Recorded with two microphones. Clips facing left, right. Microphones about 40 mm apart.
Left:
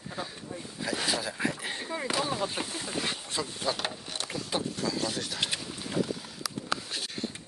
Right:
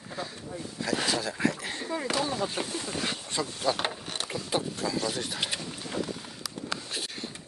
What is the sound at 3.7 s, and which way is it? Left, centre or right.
Mechanisms, right.